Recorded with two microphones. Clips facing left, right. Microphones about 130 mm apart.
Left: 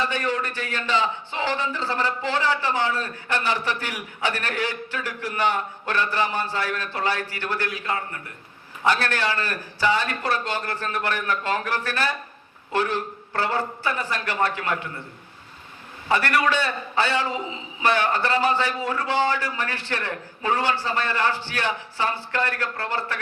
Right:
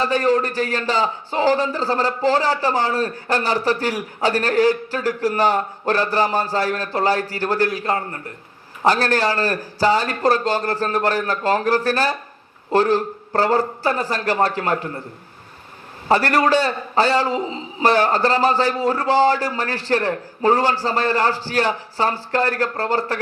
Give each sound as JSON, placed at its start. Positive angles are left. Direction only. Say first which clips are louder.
{"t": 0.0, "sound": "speech", "louder": "right 8 dB", "side_deg": -40}
{"t": 16.0, "sound": "speech", "louder": "right 5 dB", "side_deg": -40}